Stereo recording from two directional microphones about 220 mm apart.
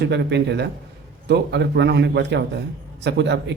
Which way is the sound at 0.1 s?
50° right (ahead or behind).